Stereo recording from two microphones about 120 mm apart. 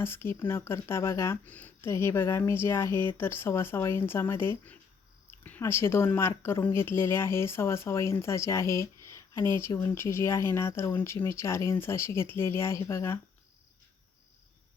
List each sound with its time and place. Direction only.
0.0 s speech: 20° left (ahead or behind)
9.0 s a sound: 25° left (ahead or behind)
9.6 s speech: 20° left (ahead or behind)